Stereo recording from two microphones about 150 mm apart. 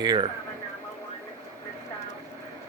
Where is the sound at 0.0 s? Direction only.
30° right (ahead or behind).